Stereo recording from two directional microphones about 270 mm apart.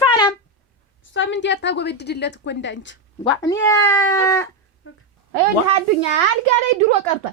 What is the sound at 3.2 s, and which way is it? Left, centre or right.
Speech, centre.